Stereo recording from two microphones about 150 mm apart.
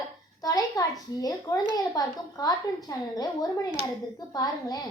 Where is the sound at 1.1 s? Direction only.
25° left (ahead or behind).